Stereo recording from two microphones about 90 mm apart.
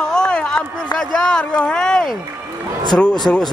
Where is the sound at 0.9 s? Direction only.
5° left (ahead or behind).